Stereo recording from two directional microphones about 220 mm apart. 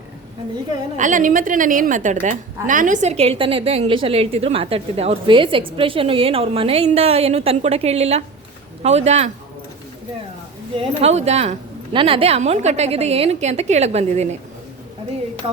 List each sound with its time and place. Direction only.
0.9 s a woman's voice: 35° right (ahead or behind)
10.8 s a woman's voice: 30° right (ahead or behind)